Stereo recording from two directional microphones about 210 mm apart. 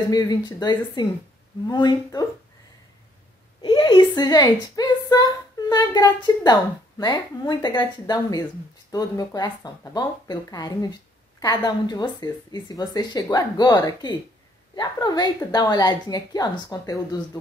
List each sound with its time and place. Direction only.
0.1 s speech: 20° left (ahead or behind)
3.6 s a woman's voice: 25° left (ahead or behind)